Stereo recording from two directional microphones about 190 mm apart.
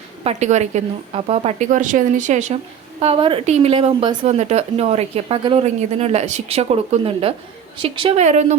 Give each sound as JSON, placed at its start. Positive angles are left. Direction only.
{"t": 0.3, "sound": "a woman's voice", "side_deg": -35}